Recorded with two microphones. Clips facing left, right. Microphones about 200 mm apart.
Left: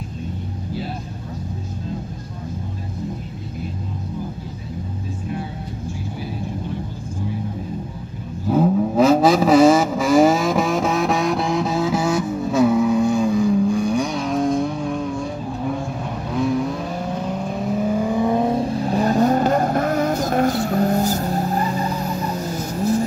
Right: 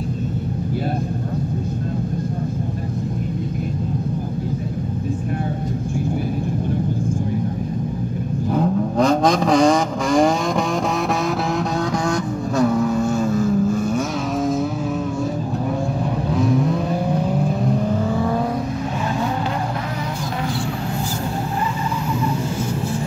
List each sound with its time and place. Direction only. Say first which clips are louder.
8.5 s vehicle: left 3 dB; 5° left (ahead or behind)
16.3 s vehicle: even; centre (ahead or behind)
17.6 s vehicle: even; 5° left (ahead or behind)
18.9 s vehicle: left 9 dB; 40° left (ahead or behind)
22.8 s music: left 5 dB; 40° left (ahead or behind)